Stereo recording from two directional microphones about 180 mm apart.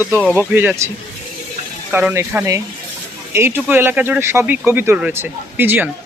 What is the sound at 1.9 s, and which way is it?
Speech, 10° right (ahead or behind).